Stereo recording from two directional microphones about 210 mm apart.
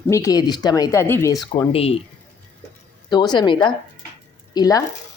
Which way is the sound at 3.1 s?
20° left (ahead or behind).